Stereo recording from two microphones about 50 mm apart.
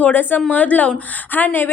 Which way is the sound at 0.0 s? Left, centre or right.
Left.